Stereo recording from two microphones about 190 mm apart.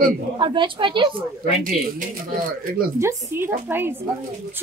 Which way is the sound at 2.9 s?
15° right (ahead or behind).